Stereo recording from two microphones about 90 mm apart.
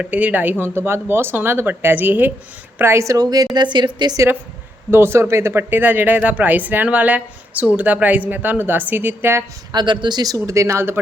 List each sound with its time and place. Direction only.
0.0 s a woman's voice: 15° right (ahead or behind); by 4.2 s 55° right (ahead or behind)
4.9 s speech: 25° right (ahead or behind)
9.7 s speech: 60° right (ahead or behind); by 11.0 s 30° right (ahead or behind)